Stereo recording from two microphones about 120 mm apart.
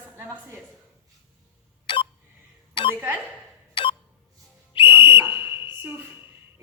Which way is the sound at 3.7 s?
45° left (ahead or behind).